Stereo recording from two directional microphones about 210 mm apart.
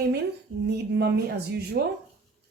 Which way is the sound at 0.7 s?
50° right (ahead or behind).